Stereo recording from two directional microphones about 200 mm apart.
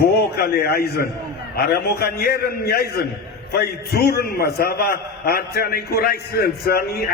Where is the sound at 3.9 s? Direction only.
50° left (ahead or behind).